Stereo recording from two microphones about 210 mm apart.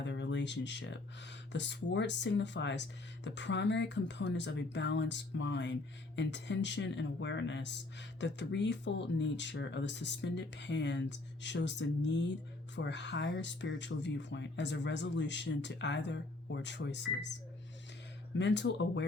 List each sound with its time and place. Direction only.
0.0 s a sound: 55° left (ahead or behind)
1.5 s speech: 55° left (ahead or behind)
18.3 s speech: 55° left (ahead or behind)